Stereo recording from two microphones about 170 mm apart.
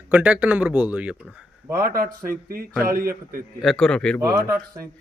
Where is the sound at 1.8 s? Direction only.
60° right (ahead or behind).